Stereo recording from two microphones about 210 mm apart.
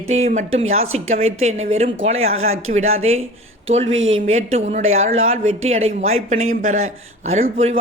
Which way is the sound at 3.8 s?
65° right (ahead or behind).